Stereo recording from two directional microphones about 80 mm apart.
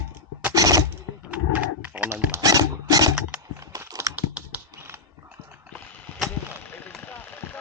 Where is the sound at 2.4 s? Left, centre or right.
Right.